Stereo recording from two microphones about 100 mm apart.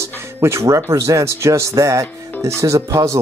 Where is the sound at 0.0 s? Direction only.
25° right (ahead or behind).